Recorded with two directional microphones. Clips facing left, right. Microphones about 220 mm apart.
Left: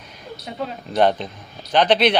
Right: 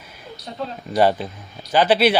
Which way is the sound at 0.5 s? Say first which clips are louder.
Left 1 dB; 10° left (ahead or behind).